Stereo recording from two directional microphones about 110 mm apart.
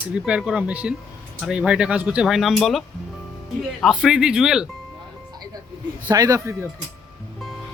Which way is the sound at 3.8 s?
5° right (ahead or behind).